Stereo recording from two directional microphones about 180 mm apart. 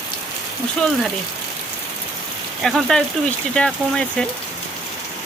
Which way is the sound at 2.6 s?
Centre (ahead or behind).